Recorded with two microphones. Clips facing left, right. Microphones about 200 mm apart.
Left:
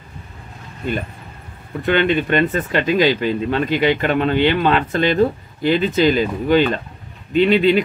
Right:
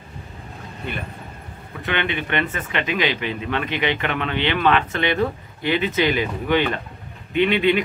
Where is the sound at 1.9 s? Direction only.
40° left (ahead or behind).